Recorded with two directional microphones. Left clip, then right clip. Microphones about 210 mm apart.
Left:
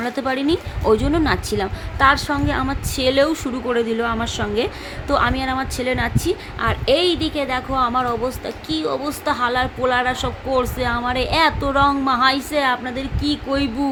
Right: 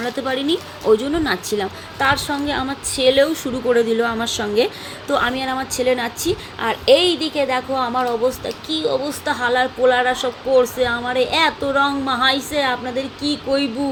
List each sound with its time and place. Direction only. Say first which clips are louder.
0.0 s speech: even; 20° left (ahead or behind)
3.7 s a woman's voice: right 4 dB; 10° left (ahead or behind)